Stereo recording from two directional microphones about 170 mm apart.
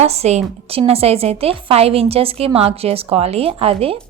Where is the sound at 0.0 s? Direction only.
40° right (ahead or behind).